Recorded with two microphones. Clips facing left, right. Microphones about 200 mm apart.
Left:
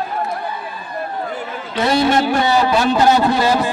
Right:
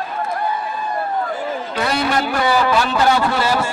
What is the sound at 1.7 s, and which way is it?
A man's voice, 25° left (ahead or behind).